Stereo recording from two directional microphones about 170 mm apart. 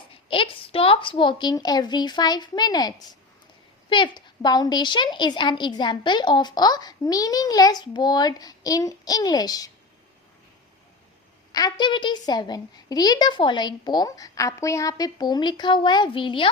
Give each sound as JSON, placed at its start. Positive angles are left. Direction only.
{"t": 0.3, "sound": "a woman's voice", "side_deg": 30}
{"t": 11.5, "sound": "a woman's voice", "side_deg": 25}